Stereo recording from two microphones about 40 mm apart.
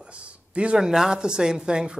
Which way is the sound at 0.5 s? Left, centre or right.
Right.